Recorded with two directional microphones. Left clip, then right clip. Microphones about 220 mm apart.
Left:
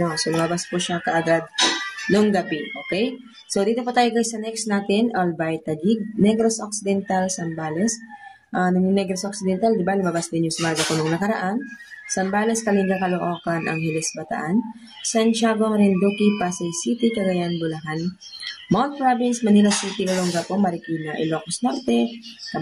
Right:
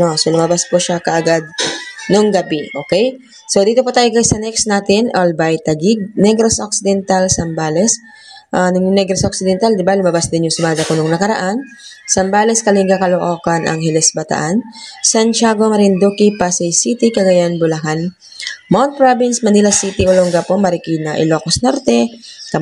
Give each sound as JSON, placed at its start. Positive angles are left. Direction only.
{"t": 0.0, "sound": "a woman's voice", "side_deg": -25}